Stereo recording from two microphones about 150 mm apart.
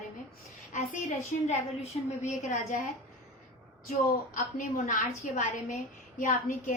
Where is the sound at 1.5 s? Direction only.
50° left (ahead or behind).